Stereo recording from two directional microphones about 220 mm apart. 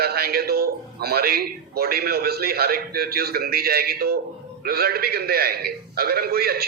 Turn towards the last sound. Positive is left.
turn(degrees=-45)  # may be behind; listen again after turning